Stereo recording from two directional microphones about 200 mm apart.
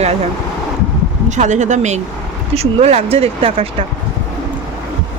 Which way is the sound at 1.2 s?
35° right (ahead or behind).